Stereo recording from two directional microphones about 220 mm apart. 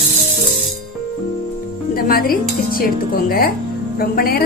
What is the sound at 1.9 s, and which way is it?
A woman's voice, 40° left (ahead or behind).